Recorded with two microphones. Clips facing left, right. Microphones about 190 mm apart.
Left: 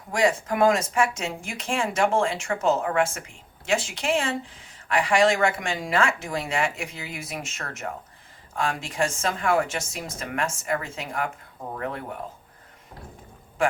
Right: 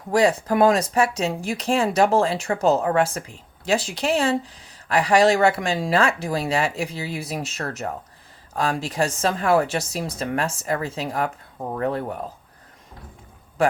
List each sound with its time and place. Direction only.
0.1 s speech: 35° right (ahead or behind)